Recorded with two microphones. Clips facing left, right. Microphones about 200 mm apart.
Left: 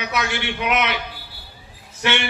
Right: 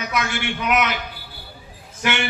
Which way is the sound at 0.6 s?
45° right (ahead or behind).